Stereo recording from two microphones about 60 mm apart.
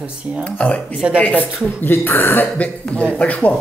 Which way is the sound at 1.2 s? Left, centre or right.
Left.